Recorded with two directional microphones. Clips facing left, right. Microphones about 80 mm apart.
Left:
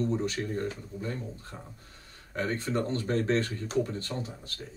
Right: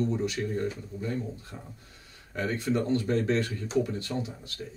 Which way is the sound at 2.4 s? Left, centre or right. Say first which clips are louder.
Right 2 dB; left.